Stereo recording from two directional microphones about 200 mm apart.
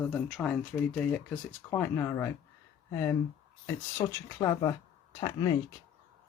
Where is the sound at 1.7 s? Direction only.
15° left (ahead or behind).